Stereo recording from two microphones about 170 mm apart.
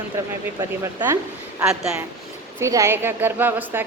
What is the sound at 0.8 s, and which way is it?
Speech, 15° right (ahead or behind).